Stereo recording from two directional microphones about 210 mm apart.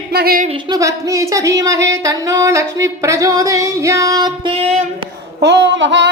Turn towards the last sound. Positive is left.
turn(degrees=-60)  # may be behind; listen again after turning